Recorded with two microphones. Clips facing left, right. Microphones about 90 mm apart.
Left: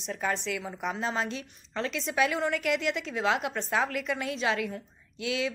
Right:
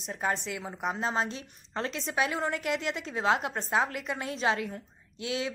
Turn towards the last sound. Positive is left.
turn(degrees=-30)  # may be behind; listen again after turning